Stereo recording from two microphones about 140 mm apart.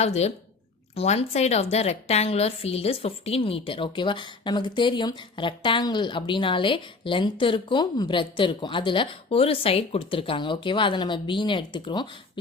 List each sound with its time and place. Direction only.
0.0 s a woman's voice: 50° left (ahead or behind); by 12.1 s 35° left (ahead or behind)